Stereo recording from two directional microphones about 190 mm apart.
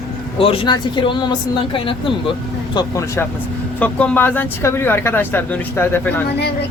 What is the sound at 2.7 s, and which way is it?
Speech, 20° left (ahead or behind).